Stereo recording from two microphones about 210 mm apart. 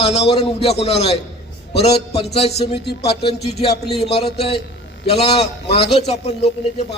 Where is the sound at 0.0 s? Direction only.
30° left (ahead or behind).